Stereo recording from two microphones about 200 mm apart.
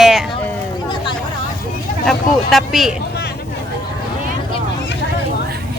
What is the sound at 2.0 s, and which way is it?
Speech, centre (ahead or behind).